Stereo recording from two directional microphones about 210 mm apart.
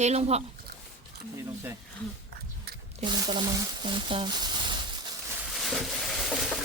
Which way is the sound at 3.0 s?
20° right (ahead or behind).